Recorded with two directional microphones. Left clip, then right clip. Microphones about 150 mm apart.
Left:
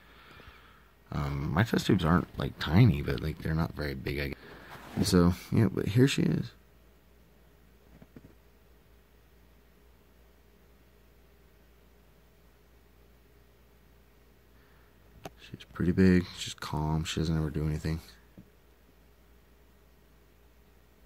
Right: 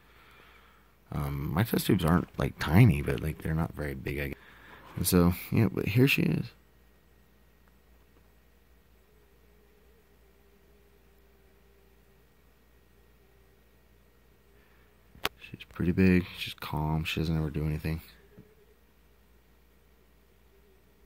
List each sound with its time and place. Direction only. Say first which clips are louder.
0.0 s speech: left 3 dB; 15° right (ahead or behind)
15.3 s speech: even; 20° right (ahead or behind)